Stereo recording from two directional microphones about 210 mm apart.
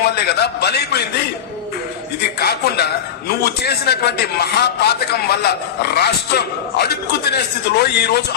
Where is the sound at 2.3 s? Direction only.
50° left (ahead or behind).